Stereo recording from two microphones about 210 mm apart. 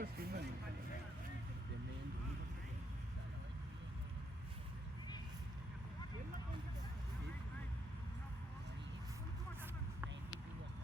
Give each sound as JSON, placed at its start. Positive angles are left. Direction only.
{"t": 0.0, "sound": "vehicle", "side_deg": -45}